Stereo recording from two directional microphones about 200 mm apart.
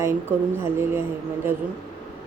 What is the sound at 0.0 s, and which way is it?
A man's voice, 10° right (ahead or behind).